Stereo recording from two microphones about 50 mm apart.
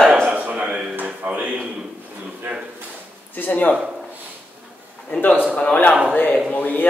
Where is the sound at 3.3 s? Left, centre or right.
Left.